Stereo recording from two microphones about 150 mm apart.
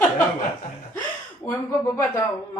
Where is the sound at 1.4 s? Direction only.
20° left (ahead or behind).